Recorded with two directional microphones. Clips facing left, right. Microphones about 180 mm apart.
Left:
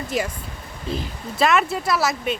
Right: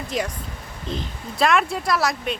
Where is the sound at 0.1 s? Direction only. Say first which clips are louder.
Left 1 dB; 5° left (ahead or behind).